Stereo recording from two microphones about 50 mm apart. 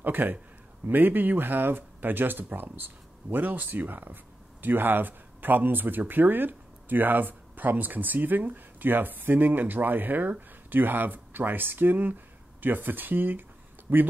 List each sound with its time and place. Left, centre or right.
0.0 s a man's voice: right